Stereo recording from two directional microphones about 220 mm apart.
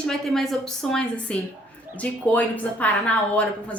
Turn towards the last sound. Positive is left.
turn(degrees=5)  # may be behind; listen again after turning